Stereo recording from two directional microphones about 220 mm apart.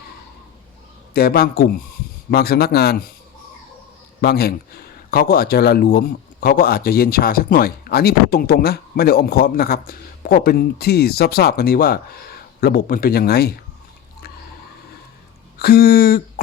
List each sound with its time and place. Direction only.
1.1 s speech: 45° left (ahead or behind)
4.2 s speech: 45° left (ahead or behind)
15.5 s speech: 45° left (ahead or behind)